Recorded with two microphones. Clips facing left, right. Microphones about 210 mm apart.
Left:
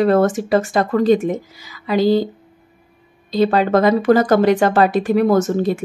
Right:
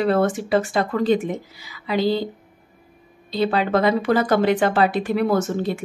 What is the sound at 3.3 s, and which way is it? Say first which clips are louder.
Speech: left 5 dB; 45° left (ahead or behind).